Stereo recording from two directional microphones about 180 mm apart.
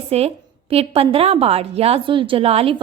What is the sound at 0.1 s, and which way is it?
A woman's voice, 35° right (ahead or behind).